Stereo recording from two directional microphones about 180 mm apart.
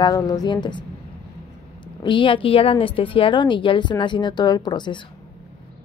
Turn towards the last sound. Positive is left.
turn(degrees=25)  # may be behind; listen again after turning